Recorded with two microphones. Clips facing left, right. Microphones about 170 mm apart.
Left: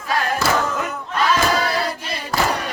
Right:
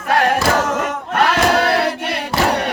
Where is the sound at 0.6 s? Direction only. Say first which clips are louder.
Right 4 dB; 90° right.